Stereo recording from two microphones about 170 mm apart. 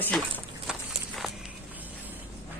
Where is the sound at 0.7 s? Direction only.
Centre (ahead or behind).